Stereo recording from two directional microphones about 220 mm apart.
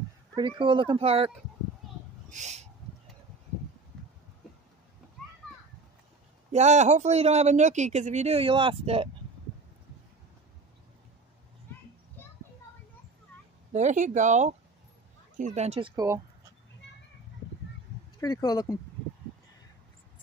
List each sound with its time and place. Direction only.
0.4 s speech: 20° right (ahead or behind)
2.3 s owl: 30° right (ahead or behind)
6.5 s speech: 30° right (ahead or behind)
13.7 s speech: 35° right (ahead or behind)
18.2 s speech: 15° left (ahead or behind)